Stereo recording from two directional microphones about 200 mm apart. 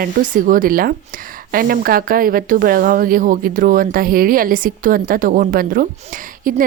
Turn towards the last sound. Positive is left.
turn(degrees=-45)  # may be behind; listen again after turning